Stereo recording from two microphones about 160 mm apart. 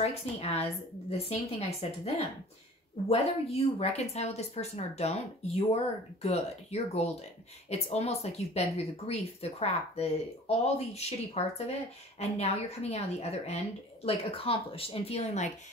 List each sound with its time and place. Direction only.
0.0 s speech: 40° left (ahead or behind)